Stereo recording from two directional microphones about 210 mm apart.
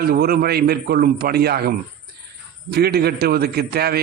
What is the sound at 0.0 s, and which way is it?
A man's voice, 45° right (ahead or behind).